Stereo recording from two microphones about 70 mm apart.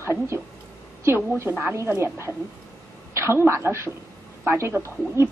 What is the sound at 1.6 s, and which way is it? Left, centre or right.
A woman's voice, right.